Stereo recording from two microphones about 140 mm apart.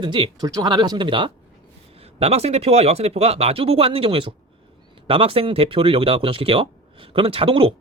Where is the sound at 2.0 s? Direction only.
45° right (ahead or behind).